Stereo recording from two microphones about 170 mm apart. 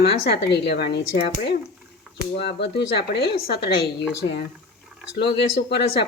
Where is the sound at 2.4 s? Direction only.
85° left.